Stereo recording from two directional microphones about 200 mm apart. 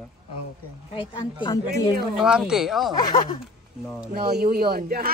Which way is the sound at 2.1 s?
5° right (ahead or behind).